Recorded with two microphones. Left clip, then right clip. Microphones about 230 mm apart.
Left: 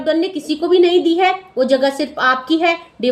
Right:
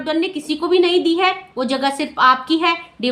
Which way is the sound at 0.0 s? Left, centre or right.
Centre.